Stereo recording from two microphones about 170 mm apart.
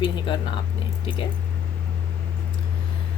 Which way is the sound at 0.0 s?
25° left (ahead or behind).